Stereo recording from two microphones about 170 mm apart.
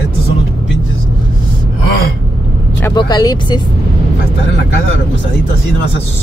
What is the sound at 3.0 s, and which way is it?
Speech, 25° left (ahead or behind).